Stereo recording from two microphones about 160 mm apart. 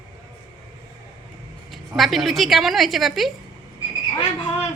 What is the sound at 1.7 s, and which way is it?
A woman's voice, centre (ahead or behind).